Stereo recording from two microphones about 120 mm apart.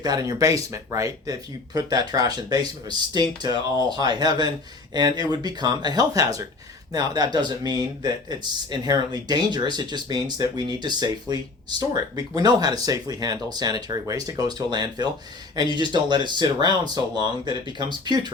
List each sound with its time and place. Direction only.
0.0 s speech: 30° right (ahead or behind)